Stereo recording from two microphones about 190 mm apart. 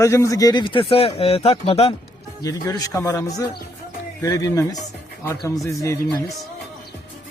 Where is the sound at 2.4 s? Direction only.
20° left (ahead or behind).